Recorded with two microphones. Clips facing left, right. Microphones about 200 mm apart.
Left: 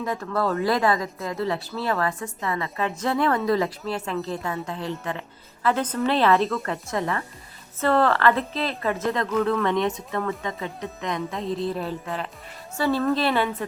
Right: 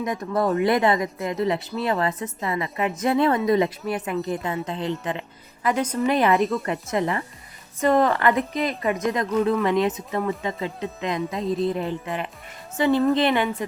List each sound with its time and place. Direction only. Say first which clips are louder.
0.0 s a woman's voice: right 2 dB; 15° right (ahead or behind)